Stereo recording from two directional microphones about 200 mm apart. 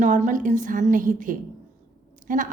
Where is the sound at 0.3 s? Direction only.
40° right (ahead or behind).